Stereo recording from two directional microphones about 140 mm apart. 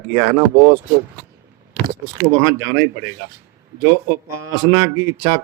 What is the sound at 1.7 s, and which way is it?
Speech, 20° right (ahead or behind).